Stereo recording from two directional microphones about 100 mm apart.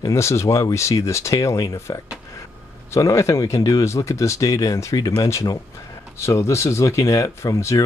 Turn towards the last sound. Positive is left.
turn(degrees=30)  # may be behind; listen again after turning